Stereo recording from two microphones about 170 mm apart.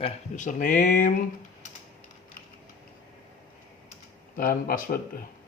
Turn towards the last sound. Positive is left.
turn(degrees=55)  # may be behind; listen again after turning